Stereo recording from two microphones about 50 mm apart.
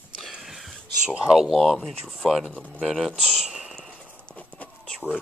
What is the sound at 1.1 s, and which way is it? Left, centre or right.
Speech, centre.